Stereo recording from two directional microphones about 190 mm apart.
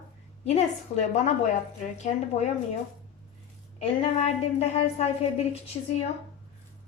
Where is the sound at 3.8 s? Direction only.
35° left (ahead or behind).